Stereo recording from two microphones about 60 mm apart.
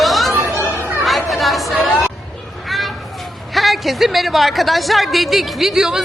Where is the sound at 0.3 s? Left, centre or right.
Right.